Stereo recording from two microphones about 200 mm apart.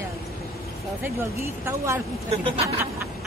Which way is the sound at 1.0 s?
15° right (ahead or behind).